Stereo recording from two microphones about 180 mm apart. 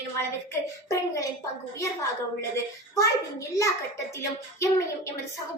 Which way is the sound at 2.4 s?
15° left (ahead or behind).